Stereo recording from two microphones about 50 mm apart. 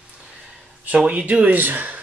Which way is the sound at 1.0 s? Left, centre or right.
Right.